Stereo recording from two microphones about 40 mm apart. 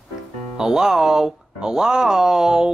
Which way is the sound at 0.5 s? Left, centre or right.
Centre.